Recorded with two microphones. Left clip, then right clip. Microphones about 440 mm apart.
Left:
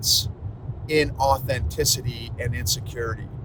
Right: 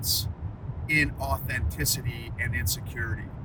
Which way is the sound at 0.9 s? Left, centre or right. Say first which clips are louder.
Left 6 dB; centre.